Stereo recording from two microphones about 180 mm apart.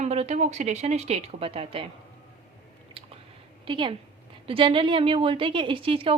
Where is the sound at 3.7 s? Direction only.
25° right (ahead or behind).